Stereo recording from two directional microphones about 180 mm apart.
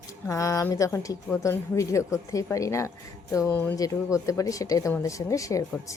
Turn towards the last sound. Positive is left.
turn(degrees=20)  # may be behind; listen again after turning